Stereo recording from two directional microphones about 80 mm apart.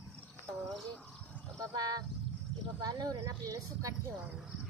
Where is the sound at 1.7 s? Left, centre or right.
Right.